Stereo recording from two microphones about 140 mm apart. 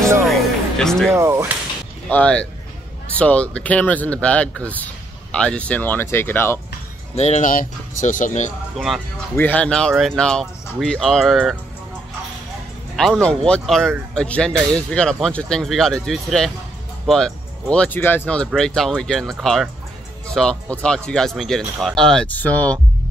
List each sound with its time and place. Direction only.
0.2 s music: centre (ahead or behind)
1.1 s speech: 20° right (ahead or behind)
2.0 s speech: 10° left (ahead or behind)
7.2 s speech: 55° left (ahead or behind)
8.7 s speech: centre (ahead or behind)
9.4 s speech: 10° left (ahead or behind)
12.9 s speech: 5° left (ahead or behind)